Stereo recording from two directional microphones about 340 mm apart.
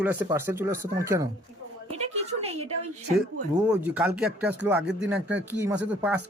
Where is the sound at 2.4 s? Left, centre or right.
Centre.